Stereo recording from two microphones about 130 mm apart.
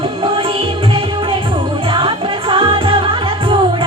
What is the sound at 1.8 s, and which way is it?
Music, 45° right (ahead or behind).